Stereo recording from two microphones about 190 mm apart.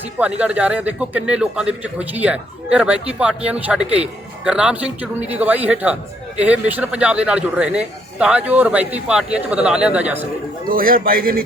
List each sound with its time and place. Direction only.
0.2 s a man's voice: 5° right (ahead or behind)
10.7 s a man's voice: 50° right (ahead or behind)